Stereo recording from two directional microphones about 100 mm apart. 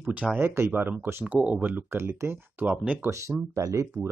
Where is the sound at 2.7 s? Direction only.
15° right (ahead or behind).